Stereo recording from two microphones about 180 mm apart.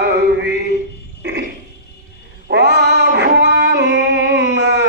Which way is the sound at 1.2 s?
70° right (ahead or behind).